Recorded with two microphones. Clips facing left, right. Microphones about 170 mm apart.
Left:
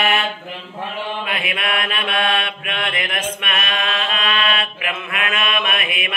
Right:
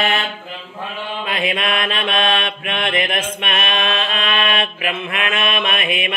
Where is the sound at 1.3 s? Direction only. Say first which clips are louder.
Right 6 dB; 30° right (ahead or behind).